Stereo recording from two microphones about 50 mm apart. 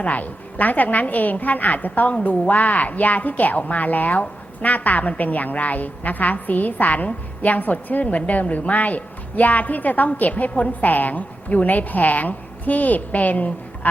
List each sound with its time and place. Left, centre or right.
0.0 s a woman's voice: left